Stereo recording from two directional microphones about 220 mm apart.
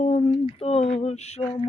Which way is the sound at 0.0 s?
30° left (ahead or behind).